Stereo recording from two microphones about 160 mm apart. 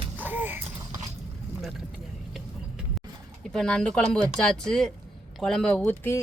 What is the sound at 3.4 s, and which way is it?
Speech, 5° left (ahead or behind).